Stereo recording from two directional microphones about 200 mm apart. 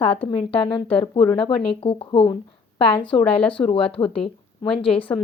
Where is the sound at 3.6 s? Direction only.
30° left (ahead or behind).